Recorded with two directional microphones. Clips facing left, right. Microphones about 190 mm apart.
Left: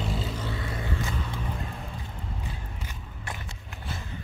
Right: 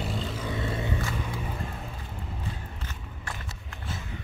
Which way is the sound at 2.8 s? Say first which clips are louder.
Even; 20° left (ahead or behind).